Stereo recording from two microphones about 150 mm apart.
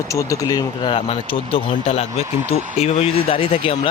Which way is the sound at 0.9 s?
35° left (ahead or behind).